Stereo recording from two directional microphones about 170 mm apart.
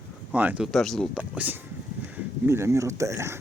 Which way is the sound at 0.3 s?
5° right (ahead or behind).